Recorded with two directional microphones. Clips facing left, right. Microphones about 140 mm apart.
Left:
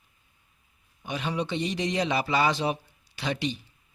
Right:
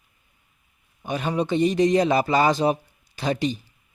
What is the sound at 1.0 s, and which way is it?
A man's voice, 45° right (ahead or behind).